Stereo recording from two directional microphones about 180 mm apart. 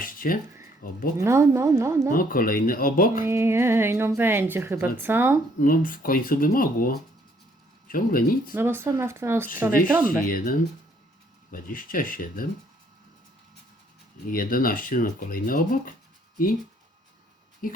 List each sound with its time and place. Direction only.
0.0 s a sound: 50° left (ahead or behind)
0.8 s speech: 55° left (ahead or behind)
1.2 s speech: 15° right (ahead or behind)
2.1 s speech: 50° left (ahead or behind)
3.2 s speech: 15° right (ahead or behind)
5.5 s speech: 50° left (ahead or behind)
8.5 s speech: 15° right (ahead or behind)
10.2 s speech: 50° left (ahead or behind)
14.3 s speech: 50° left (ahead or behind)
17.6 s speech: 50° left (ahead or behind)